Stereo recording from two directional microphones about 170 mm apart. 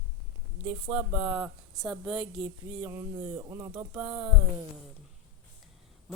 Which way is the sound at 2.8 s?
15° right (ahead or behind).